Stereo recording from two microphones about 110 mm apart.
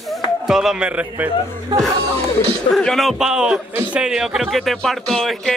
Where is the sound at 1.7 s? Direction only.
40° right (ahead or behind).